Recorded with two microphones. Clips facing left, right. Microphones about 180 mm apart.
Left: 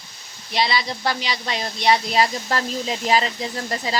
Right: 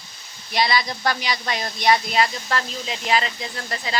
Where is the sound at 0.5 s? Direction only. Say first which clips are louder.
Right 1 dB; 30° left (ahead or behind).